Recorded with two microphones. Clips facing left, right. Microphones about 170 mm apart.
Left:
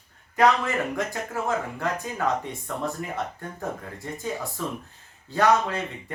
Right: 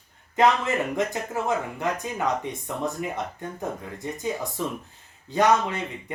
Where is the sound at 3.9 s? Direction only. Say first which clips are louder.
Right 2 dB; 20° right (ahead or behind).